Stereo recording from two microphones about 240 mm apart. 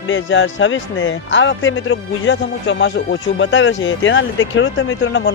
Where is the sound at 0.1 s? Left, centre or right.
Left.